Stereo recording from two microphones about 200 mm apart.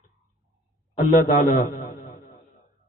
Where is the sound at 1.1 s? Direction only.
45° left (ahead or behind).